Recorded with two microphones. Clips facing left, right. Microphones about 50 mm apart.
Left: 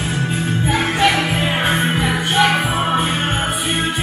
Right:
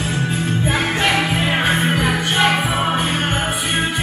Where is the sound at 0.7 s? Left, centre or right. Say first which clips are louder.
Left 3 dB; centre.